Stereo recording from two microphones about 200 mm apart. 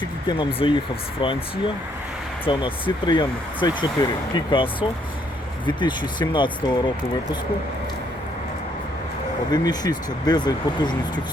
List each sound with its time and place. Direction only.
0.3 s speech: 25° left (ahead or behind)
9.5 s speech: 20° left (ahead or behind)